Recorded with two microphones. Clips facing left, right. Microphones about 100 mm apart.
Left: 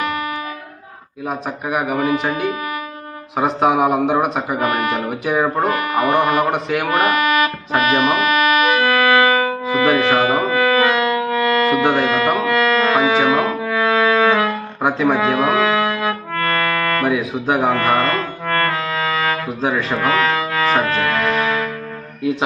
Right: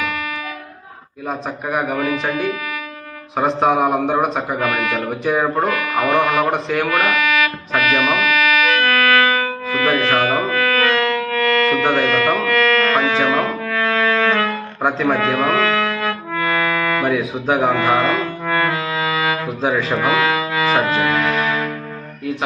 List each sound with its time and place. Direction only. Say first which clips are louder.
1.3 s a man's voice: even; 5° left (ahead or behind)
3.3 s a man's voice: even; 5° left (ahead or behind)
4.6 s speech: left 2 dB; 40° left (ahead or behind)
4.9 s a man's voice: even; 5° left (ahead or behind)
6.8 s speech: left 3 dB; 30° left (ahead or behind)
7.1 s music: left 2 dB; 45° left (ahead or behind)
7.8 s insect: left 2 dB; 40° left (ahead or behind)
8.6 s music: left 2 dB; 20° left (ahead or behind)
16.3 s music: right 2 dB; 5° right (ahead or behind)